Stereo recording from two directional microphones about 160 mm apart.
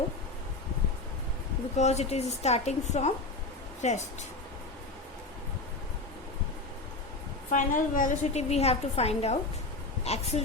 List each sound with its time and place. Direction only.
1.7 s a woman's voice: 45° left (ahead or behind)
7.5 s a woman's voice: 55° left (ahead or behind)